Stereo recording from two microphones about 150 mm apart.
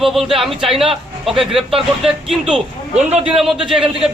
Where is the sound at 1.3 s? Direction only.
35° right (ahead or behind).